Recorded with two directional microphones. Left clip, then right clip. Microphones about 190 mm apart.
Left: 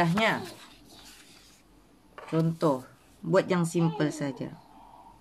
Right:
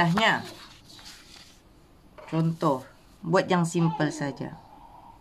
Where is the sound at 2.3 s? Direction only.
10° right (ahead or behind).